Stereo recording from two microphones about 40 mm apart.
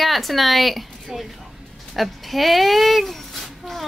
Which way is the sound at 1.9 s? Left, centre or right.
Centre.